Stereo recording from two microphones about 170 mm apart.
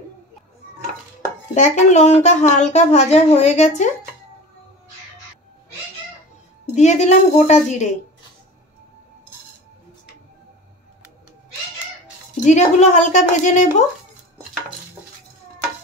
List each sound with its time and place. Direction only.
1.5 s speech: 45° left (ahead or behind)
6.7 s a woman's voice: 40° left (ahead or behind)
12.4 s speech: 45° left (ahead or behind)